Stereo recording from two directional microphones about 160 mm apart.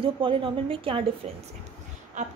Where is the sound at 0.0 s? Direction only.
35° right (ahead or behind).